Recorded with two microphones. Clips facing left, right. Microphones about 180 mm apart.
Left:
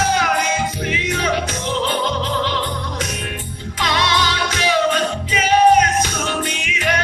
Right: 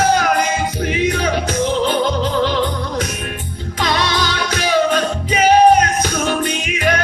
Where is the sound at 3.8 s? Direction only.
45° right (ahead or behind).